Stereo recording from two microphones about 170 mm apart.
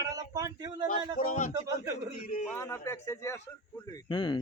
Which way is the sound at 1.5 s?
20° right (ahead or behind).